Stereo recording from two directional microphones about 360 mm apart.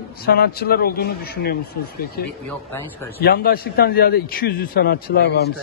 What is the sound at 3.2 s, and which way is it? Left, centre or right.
A man's voice, left.